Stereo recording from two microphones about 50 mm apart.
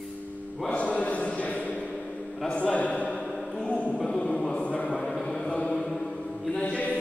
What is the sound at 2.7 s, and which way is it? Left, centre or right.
Chant, left.